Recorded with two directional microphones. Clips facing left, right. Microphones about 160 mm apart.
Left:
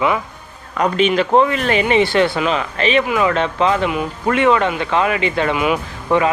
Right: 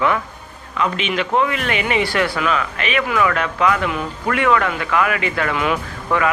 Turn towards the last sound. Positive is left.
turn(degrees=20)  # may be behind; listen again after turning